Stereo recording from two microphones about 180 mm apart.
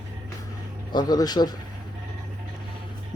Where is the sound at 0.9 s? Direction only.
25° left (ahead or behind).